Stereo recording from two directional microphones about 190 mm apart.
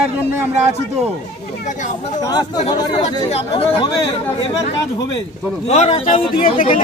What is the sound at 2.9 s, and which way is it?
Speech, 35° left (ahead or behind).